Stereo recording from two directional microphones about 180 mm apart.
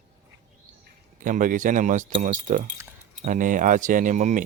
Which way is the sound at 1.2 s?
45° right (ahead or behind).